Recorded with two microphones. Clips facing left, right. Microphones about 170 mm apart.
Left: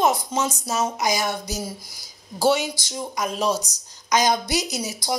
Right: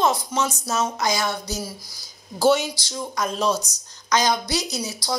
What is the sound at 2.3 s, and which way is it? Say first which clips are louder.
Speech: right 2 dB; 5° left (ahead or behind).